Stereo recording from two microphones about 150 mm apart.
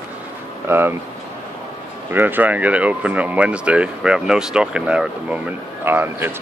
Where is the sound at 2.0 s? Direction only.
15° right (ahead or behind).